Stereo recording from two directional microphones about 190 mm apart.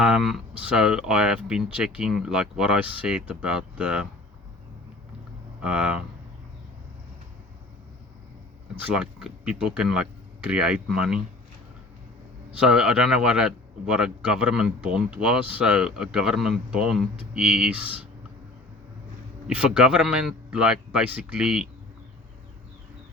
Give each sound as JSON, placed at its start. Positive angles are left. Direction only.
{"t": 0.0, "sound": "a man's voice", "side_deg": -5}
{"t": 5.6, "sound": "a man's voice", "side_deg": -5}
{"t": 8.8, "sound": "a man's voice", "side_deg": -5}
{"t": 12.5, "sound": "a man's voice", "side_deg": -5}
{"t": 19.5, "sound": "a man's voice", "side_deg": -5}